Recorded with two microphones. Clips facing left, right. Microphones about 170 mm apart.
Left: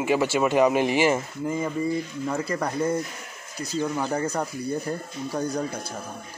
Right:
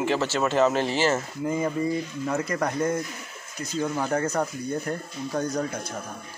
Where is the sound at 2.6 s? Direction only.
10° left (ahead or behind).